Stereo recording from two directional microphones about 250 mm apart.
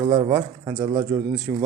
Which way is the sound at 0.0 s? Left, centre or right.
Centre.